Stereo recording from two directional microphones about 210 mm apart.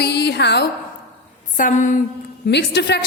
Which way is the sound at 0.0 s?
50° left (ahead or behind).